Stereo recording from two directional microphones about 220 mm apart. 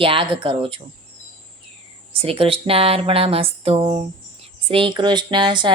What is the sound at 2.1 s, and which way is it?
Speech, 25° right (ahead or behind).